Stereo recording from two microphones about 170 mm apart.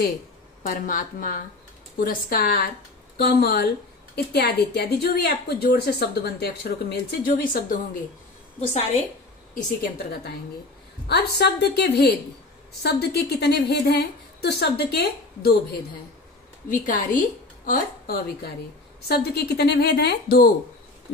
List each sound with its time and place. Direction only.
0.7 s a woman's voice: 55° left (ahead or behind)
8.5 s a woman's voice: 40° left (ahead or behind)
11.1 s a woman's voice: 70° left (ahead or behind)
16.6 s a woman's voice: 50° left (ahead or behind)
19.0 s a woman's voice: 75° left (ahead or behind)